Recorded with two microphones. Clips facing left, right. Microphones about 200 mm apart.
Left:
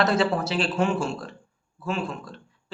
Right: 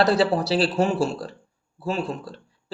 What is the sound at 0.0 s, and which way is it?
Speech, 35° right (ahead or behind).